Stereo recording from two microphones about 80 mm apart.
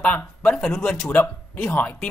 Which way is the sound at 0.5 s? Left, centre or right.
Centre.